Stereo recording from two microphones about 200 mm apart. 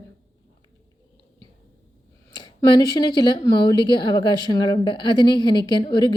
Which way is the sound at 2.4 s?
20° left (ahead or behind).